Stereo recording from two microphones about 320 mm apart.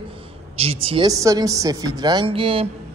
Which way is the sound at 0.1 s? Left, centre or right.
Centre.